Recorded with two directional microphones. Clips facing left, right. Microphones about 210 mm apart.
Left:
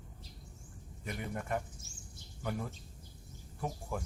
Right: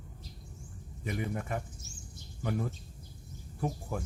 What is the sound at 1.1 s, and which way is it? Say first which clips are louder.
Speech: right 3 dB; centre (ahead or behind).